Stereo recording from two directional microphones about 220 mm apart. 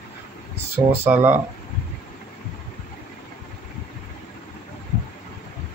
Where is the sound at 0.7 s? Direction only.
10° right (ahead or behind).